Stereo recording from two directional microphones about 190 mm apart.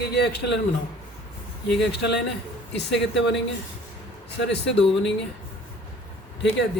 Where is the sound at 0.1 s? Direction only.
60° left (ahead or behind).